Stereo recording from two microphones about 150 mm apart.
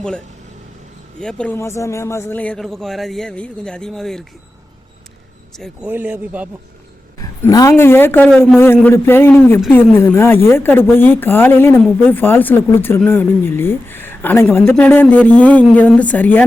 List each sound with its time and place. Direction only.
1.2 s a man's voice: 5° left (ahead or behind)
5.8 s speech: 10° right (ahead or behind)
7.2 s a woman's voice: 25° left (ahead or behind)